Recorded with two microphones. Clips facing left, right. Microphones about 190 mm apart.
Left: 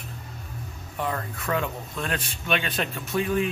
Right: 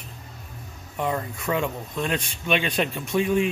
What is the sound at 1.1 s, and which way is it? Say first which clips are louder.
Speech: right 4 dB; 15° right (ahead or behind).